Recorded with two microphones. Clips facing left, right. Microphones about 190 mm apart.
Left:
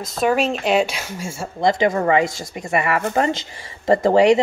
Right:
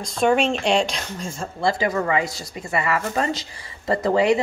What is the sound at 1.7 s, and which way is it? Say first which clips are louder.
Speech: left 5 dB; 25° left (ahead or behind).